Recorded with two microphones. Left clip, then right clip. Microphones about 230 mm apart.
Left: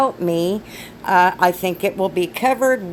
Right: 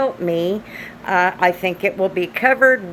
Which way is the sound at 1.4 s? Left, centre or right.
Left.